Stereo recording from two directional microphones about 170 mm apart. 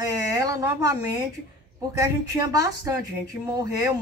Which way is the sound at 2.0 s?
20° right (ahead or behind).